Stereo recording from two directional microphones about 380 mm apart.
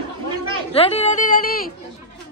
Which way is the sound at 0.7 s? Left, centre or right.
Centre.